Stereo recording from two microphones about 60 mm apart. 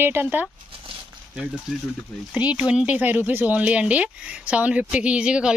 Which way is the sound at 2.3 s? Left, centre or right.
Right.